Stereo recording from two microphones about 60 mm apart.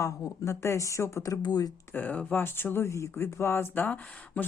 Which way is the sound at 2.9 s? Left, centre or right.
Left.